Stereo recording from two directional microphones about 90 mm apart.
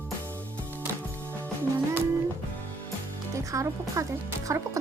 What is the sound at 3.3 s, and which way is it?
Speech, 35° right (ahead or behind).